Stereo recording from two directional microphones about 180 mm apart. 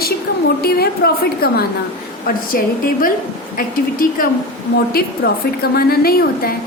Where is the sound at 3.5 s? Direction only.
50° left (ahead or behind).